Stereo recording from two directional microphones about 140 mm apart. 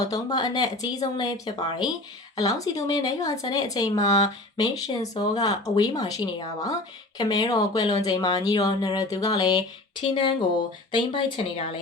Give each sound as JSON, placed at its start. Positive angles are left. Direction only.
{"t": 0.1, "sound": "speech", "side_deg": 30}